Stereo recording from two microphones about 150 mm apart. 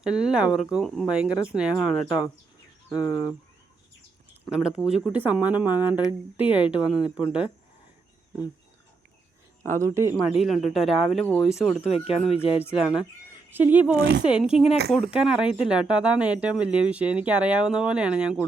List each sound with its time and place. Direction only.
0.0 s speech: 5° right (ahead or behind)
3.0 s speech: 20° left (ahead or behind)
4.4 s speech: 5° right (ahead or behind)
9.6 s speech: 20° right (ahead or behind)
10.2 s speech: centre (ahead or behind)
11.9 s speech: 40° left (ahead or behind)
12.7 s speech: 5° right (ahead or behind)
13.9 s speech: 90° right
14.2 s speech: 5° right (ahead or behind)